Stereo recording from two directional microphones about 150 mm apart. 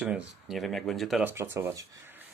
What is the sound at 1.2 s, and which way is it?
Speech, 15° right (ahead or behind).